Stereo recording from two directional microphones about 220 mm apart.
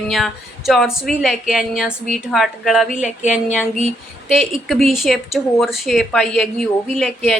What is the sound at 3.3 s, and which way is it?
Speech, 5° right (ahead or behind).